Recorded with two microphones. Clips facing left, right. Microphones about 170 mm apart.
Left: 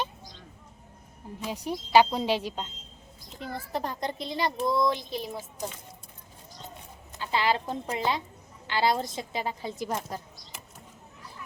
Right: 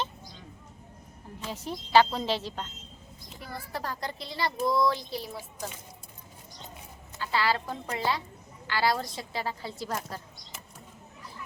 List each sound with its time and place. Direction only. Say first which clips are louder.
1.4 s speech: left 3 dB; 15° left (ahead or behind)
7.2 s speech: left 1 dB; 20° left (ahead or behind)